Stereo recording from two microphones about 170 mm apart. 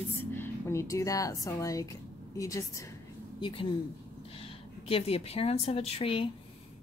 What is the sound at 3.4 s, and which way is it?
A woman's voice, 30° left (ahead or behind).